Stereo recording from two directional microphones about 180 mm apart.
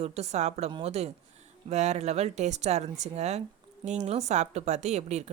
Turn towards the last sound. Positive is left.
turn(degrees=-40)  # may be behind; listen again after turning